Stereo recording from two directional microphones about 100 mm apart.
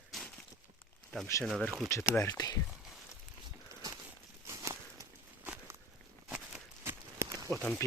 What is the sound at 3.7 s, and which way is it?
Walk, 35° right (ahead or behind).